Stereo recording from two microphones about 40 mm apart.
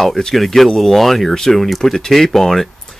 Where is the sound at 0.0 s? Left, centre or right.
Centre.